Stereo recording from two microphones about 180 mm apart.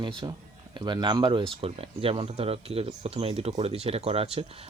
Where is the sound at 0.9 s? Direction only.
25° right (ahead or behind).